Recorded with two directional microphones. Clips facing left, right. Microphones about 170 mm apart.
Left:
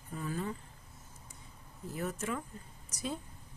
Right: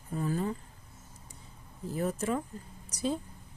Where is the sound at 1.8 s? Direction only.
30° right (ahead or behind).